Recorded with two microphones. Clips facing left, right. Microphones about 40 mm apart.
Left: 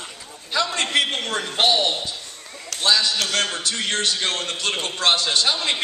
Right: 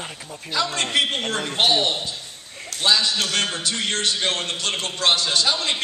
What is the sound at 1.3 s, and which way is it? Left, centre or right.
A man's voice, centre.